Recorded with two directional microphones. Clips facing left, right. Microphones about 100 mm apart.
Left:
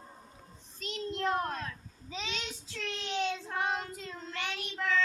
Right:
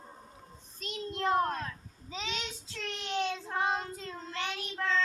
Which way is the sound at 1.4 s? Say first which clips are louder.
Right 4 dB; 35° right (ahead or behind).